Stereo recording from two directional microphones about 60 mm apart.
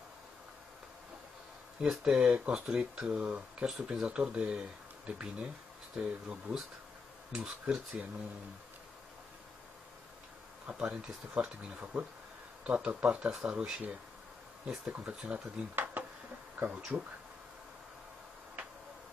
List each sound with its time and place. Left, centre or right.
1.8 s speech: centre
3.6 s speech: centre
10.7 s speech: centre
15.7 s a sound: right
16.7 s speech: centre